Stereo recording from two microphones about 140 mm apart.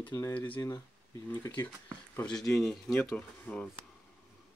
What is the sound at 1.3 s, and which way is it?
Speech, 15° left (ahead or behind).